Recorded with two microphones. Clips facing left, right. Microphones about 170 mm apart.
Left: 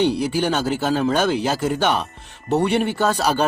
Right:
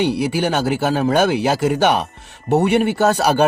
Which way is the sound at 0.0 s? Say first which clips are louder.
Right 1 dB; 10° right (ahead or behind).